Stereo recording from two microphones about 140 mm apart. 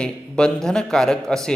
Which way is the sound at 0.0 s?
5° left (ahead or behind).